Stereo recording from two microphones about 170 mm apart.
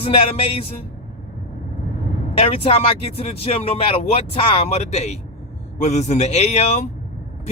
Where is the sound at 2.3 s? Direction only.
35° left (ahead or behind).